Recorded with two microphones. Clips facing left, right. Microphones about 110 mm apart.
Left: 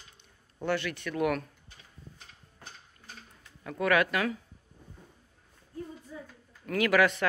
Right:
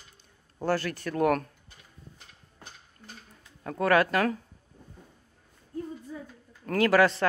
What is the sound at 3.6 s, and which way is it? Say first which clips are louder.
Speech: right 3 dB; 35° right (ahead or behind).